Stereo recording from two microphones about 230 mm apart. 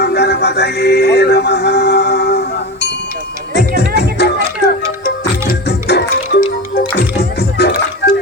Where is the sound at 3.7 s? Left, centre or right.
Left.